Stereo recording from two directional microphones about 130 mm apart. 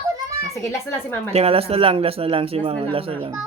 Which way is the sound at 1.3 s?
50° right (ahead or behind).